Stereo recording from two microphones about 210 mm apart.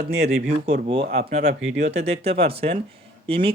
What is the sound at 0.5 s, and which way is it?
Speech, 30° right (ahead or behind).